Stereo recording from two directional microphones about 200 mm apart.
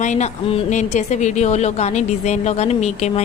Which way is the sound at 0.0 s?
35° left (ahead or behind).